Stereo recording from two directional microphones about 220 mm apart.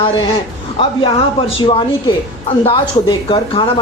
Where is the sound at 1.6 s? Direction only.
20° left (ahead or behind).